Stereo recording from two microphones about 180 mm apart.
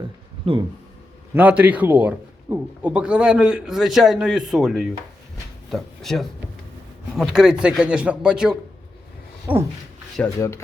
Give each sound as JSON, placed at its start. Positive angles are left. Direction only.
{"t": 0.4, "sound": "speech", "side_deg": -30}
{"t": 1.3, "sound": "a man's voice", "side_deg": -10}
{"t": 9.5, "sound": "a sound", "side_deg": -10}
{"t": 10.2, "sound": "a man's voice", "side_deg": 5}